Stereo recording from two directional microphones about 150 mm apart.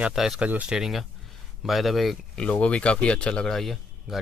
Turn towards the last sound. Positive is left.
turn(degrees=0)  # may be behind; listen again after turning